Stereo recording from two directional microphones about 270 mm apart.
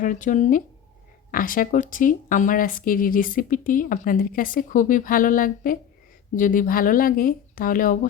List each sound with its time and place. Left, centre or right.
0.0 s speech: left